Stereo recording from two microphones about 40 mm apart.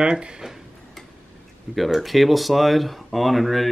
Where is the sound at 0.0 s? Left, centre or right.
Right.